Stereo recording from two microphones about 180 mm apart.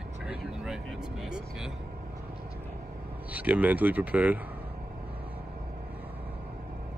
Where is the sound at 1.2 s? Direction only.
5° right (ahead or behind).